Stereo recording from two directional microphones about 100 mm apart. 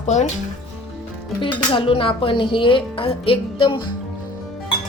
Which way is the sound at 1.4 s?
60° left (ahead or behind).